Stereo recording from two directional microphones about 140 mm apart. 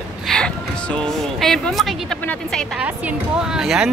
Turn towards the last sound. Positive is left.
turn(degrees=-5)  # may be behind; listen again after turning